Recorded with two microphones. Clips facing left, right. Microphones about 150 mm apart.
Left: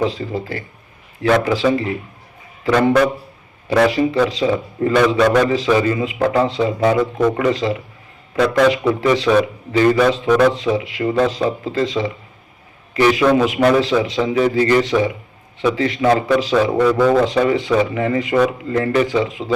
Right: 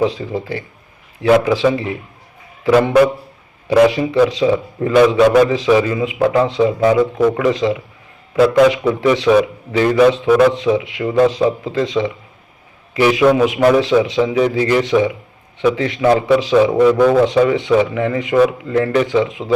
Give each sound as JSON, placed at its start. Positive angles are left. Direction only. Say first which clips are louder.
{"t": 0.3, "sound": "speech", "louder": "right 2 dB", "side_deg": -20}
{"t": 1.2, "sound": "a man's voice", "louder": "right 3 dB", "side_deg": -10}
{"t": 2.6, "sound": "speech", "louder": "right 2 dB", "side_deg": -5}
{"t": 3.7, "sound": "a man's voice", "louder": "right 3 dB", "side_deg": -15}
{"t": 4.4, "sound": "speech", "louder": "right 2 dB", "side_deg": -5}
{"t": 7.5, "sound": "a man's voice", "louder": "right 3 dB", "side_deg": -20}
{"t": 8.4, "sound": "a man's voice", "louder": "right 3 dB", "side_deg": -5}
{"t": 9.2, "sound": "speech", "louder": "right 3 dB", "side_deg": -5}
{"t": 10.5, "sound": "speech", "louder": "right 3 dB", "side_deg": -20}
{"t": 10.8, "sound": "speech", "louder": "even", "side_deg": 0}
{"t": 11.1, "sound": "a man's voice", "louder": "right 5 dB", "side_deg": -15}